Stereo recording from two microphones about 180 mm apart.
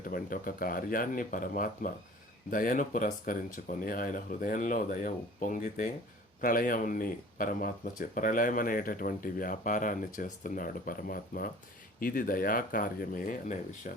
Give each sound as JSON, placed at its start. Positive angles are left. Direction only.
{"t": 0.0, "sound": "speech", "side_deg": 50}